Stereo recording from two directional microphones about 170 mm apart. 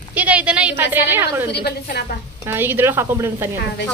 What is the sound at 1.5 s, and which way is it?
Speech, 75° left (ahead or behind).